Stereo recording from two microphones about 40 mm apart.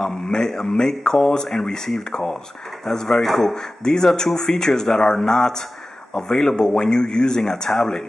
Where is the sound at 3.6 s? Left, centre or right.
Centre.